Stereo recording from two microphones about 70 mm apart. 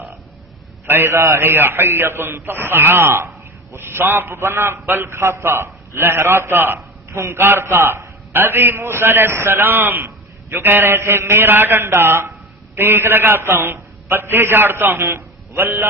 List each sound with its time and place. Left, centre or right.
0.9 s a man's voice: right